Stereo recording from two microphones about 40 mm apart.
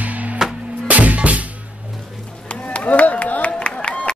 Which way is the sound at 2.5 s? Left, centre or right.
Left.